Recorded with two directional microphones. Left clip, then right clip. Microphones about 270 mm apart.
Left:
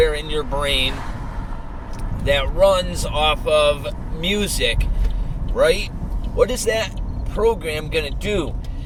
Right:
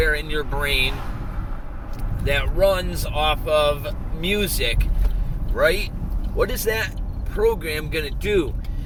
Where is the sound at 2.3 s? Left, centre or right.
Centre.